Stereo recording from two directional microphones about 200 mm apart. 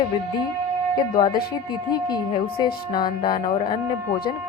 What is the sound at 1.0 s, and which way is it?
Speech, 20° left (ahead or behind).